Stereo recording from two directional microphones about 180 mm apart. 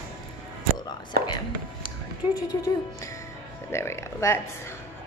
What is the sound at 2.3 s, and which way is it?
A woman's voice, 20° left (ahead or behind).